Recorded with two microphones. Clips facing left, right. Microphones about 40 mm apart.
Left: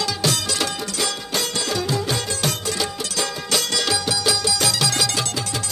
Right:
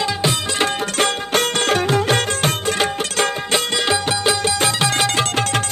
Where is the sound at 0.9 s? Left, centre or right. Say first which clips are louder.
Right 7 dB; right.